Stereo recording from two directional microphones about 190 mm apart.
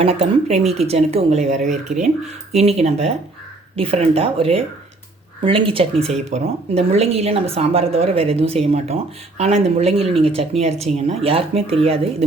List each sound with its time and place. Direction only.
0.0 s speech: 30° right (ahead or behind)